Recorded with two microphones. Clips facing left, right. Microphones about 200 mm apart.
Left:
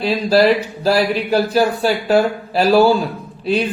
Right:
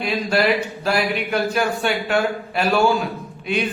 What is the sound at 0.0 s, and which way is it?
Speech, 35° left (ahead or behind).